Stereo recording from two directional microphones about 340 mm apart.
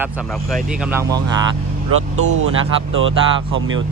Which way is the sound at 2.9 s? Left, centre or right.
Right.